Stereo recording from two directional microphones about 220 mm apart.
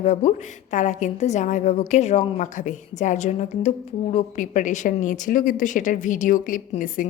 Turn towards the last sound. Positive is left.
turn(degrees=35)  # may be behind; listen again after turning